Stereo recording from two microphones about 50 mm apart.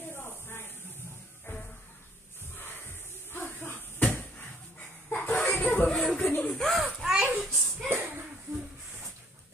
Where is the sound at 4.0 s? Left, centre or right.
Left.